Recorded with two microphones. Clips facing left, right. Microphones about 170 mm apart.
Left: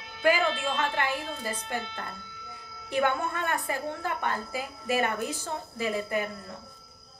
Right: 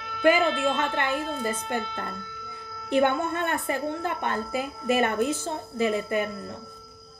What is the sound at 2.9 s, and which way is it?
A woman's voice, 25° right (ahead or behind).